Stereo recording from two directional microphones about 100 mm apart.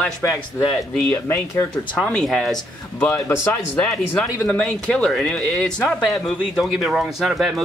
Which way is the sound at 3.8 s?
10° left (ahead or behind).